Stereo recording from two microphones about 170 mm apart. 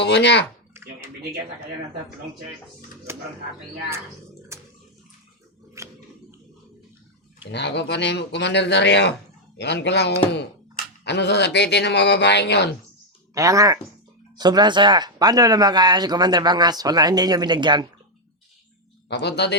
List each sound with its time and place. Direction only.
0.0 s speech: 90° left
3.1 s speech: 15° right (ahead or behind)
4.5 s water: 15° right (ahead or behind)
5.8 s a sound: 15° right (ahead or behind)
7.5 s speech: 90° left
13.3 s speech: 20° right (ahead or behind)
19.0 s speech: 80° left